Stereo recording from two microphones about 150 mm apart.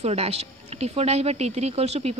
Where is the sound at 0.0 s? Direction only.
45° right (ahead or behind).